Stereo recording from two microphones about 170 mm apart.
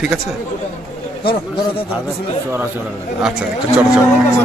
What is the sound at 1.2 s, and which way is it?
Speech, 30° left (ahead or behind).